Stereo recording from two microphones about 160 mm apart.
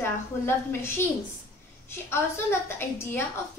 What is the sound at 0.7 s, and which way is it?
A woman's voice, 15° left (ahead or behind).